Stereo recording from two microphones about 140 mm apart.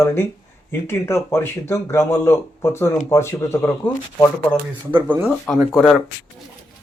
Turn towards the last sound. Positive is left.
turn(degrees=5)  # may be behind; listen again after turning